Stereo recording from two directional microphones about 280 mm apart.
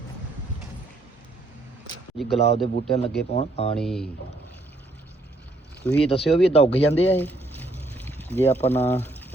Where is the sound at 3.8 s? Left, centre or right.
Centre.